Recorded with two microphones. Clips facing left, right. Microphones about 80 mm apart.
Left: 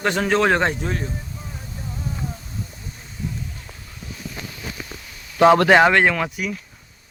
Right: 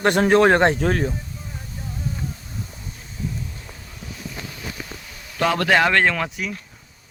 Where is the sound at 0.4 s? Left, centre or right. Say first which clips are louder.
Right 1 dB; right.